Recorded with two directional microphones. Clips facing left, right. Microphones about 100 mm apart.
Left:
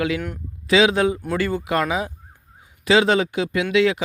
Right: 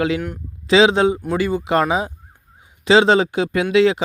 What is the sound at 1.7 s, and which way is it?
Speech, 30° right (ahead or behind).